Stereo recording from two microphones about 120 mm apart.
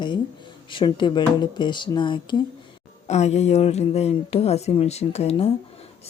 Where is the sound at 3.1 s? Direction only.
65° left (ahead or behind).